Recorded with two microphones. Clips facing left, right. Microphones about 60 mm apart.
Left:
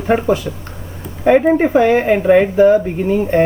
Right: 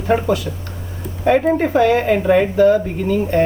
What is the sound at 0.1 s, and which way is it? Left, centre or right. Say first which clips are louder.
Speech: left 2 dB; left.